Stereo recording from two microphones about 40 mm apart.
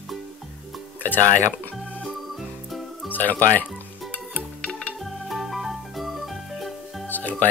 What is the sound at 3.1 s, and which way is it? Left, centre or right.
Speech, left.